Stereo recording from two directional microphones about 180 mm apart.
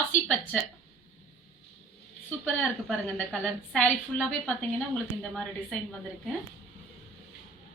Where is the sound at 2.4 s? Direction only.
10° left (ahead or behind).